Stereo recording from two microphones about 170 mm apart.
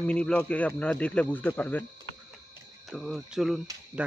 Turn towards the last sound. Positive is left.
turn(degrees=-5)  # may be behind; listen again after turning